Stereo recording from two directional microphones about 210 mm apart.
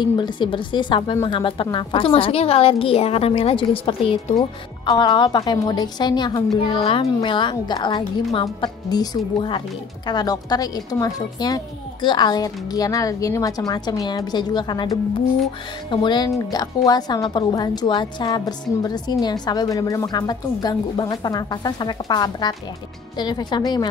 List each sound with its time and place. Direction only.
0.0 s a woman's voice: 20° left (ahead or behind)